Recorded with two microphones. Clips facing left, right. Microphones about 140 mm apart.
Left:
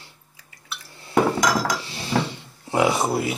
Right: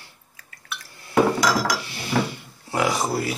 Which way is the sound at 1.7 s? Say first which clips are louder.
Even; 30° left (ahead or behind).